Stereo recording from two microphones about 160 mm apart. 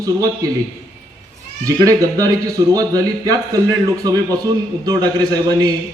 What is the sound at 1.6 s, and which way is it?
Speech, 20° right (ahead or behind).